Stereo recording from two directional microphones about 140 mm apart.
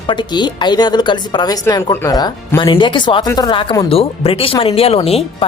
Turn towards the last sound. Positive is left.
turn(degrees=45)  # may be behind; listen again after turning